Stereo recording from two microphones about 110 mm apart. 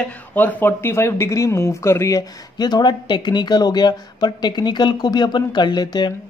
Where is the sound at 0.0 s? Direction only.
15° left (ahead or behind).